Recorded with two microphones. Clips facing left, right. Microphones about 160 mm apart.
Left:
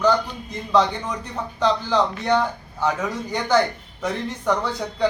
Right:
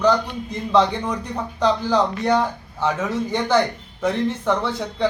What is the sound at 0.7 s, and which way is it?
Speech, 5° right (ahead or behind).